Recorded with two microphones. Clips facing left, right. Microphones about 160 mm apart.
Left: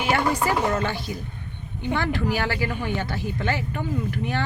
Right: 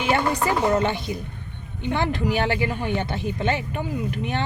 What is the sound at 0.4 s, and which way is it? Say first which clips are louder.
Speech: right 2 dB; 20° right (ahead or behind).